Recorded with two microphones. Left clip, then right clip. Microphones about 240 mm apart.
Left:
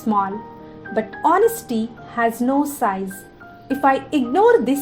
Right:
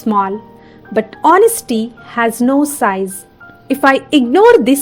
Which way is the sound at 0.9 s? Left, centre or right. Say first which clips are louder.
Right 7 dB; right.